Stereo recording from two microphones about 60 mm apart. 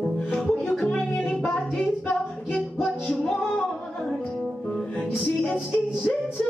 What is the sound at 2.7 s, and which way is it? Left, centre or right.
Music, centre.